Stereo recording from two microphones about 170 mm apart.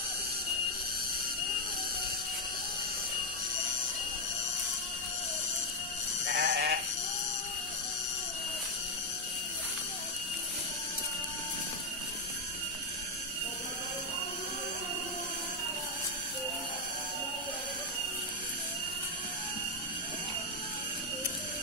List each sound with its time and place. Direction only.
6.2 s sheep: 90° right